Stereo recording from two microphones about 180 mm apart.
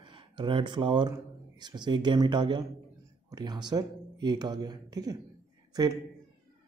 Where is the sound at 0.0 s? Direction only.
25° right (ahead or behind).